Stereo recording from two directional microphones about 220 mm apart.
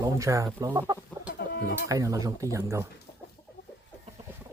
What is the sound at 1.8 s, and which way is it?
Speech, 15° right (ahead or behind).